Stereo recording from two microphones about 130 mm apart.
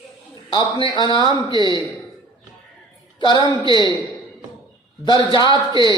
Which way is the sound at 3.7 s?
35° right (ahead or behind).